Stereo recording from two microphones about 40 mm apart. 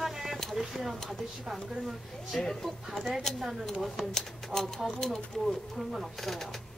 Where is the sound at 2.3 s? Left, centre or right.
Centre.